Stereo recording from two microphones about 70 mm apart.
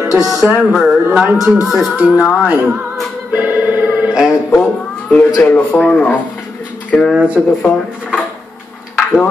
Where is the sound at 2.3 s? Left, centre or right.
Centre.